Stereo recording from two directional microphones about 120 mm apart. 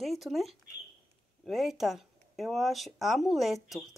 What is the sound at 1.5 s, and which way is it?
Speech, 5° right (ahead or behind).